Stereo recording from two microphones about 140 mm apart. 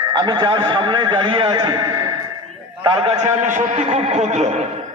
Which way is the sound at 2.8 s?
35° right (ahead or behind).